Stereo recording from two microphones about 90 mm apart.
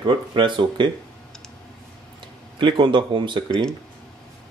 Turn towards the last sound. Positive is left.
turn(degrees=-60)  # may be behind; listen again after turning